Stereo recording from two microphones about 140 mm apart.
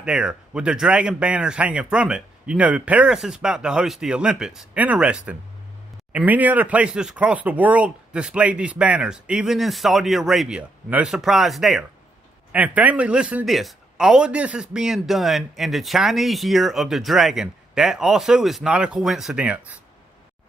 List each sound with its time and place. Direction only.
0.0 s speech: 5° right (ahead or behind)